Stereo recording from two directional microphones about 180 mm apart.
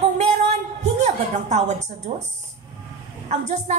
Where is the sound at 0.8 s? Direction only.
40° right (ahead or behind).